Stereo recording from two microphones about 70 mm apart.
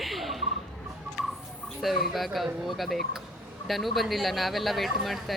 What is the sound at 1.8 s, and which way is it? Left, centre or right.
Speech, centre.